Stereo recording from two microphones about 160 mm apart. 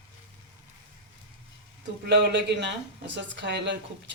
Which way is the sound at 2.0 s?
90° right.